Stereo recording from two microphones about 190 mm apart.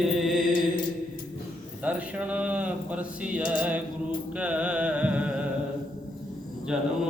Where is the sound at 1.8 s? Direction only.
5° right (ahead or behind).